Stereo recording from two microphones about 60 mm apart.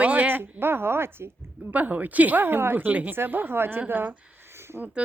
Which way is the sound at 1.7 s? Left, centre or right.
Right.